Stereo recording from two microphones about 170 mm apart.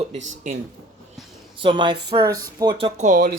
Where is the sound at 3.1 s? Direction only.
50° right (ahead or behind).